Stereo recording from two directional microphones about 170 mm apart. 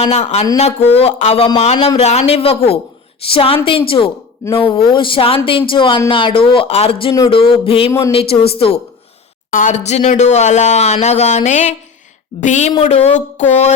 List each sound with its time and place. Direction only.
0.0 s speech: 40° left (ahead or behind)
7.1 s speech: 25° left (ahead or behind)
9.5 s speech: 50° left (ahead or behind)